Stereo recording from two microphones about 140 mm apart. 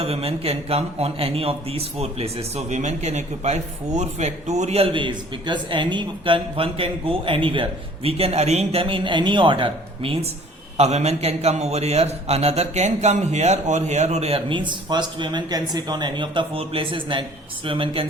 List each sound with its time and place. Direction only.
0.0 s a man's voice: 45° right (ahead or behind)